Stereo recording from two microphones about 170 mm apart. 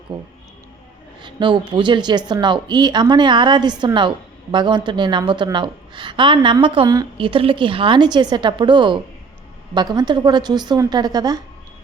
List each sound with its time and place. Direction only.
0.1 s a woman's voice: 25° right (ahead or behind)